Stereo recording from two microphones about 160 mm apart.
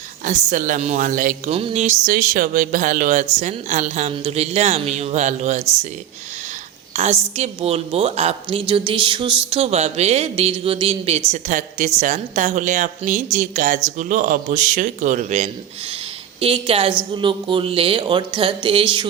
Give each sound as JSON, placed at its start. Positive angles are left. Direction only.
{"t": 0.3, "sound": "speech", "side_deg": -55}
{"t": 1.5, "sound": "speech", "side_deg": -40}
{"t": 6.9, "sound": "speech", "side_deg": -40}
{"t": 11.3, "sound": "speech", "side_deg": -50}
{"t": 16.4, "sound": "speech", "side_deg": -35}